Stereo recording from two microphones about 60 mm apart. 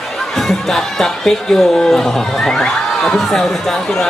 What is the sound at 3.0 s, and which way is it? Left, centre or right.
Speech, centre.